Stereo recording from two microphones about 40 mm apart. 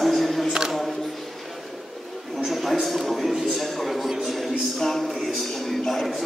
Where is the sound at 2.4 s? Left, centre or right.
Centre.